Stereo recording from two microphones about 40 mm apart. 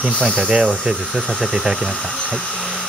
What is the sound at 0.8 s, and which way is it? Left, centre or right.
Speech, centre.